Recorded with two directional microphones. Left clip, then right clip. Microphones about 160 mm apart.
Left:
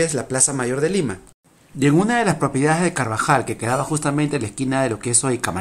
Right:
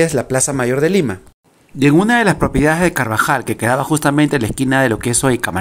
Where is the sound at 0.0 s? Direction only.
35° right (ahead or behind).